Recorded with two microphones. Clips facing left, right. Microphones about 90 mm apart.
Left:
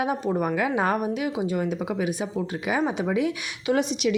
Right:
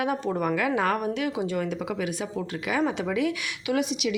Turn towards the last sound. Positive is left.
turn(degrees=35)  # may be behind; listen again after turning